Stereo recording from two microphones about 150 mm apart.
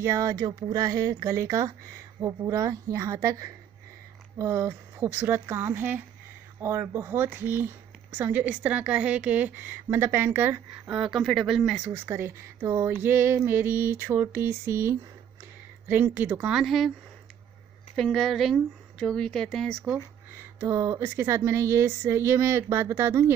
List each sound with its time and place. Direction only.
0.0 s a woman's voice: 20° right (ahead or behind); by 11.9 s 5° right (ahead or behind)
11.9 s speech: 15° right (ahead or behind); by 16.9 s centre (ahead or behind)
17.9 s speech: centre (ahead or behind)
20.5 s speech: 20° right (ahead or behind)